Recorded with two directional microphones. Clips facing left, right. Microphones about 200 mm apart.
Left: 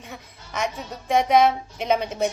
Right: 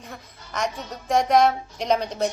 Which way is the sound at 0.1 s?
5° left (ahead or behind).